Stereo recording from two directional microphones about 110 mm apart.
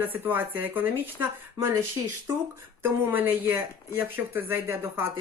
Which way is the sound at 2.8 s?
20° right (ahead or behind).